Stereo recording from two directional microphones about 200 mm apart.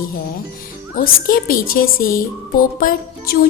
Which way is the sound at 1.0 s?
45° left (ahead or behind).